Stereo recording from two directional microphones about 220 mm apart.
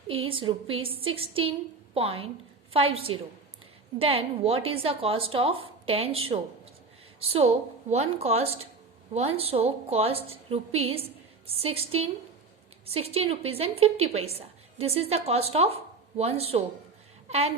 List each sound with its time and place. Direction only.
0.1 s a woman's voice: 25° right (ahead or behind)